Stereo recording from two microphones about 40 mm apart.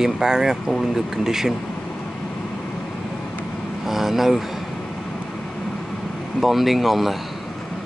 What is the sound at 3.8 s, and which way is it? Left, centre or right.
Speech, centre.